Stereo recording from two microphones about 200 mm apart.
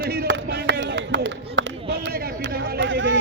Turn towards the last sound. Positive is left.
turn(degrees=-70)  # may be behind; listen again after turning